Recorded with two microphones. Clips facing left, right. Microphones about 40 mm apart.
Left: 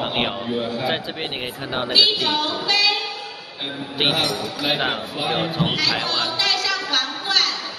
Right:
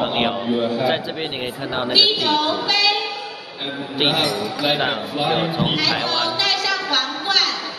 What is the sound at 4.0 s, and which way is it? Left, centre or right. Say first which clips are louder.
A man's voice: right 2 dB; centre.